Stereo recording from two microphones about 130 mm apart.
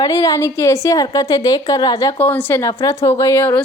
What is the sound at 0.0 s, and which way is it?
A woman's voice, 25° left (ahead or behind).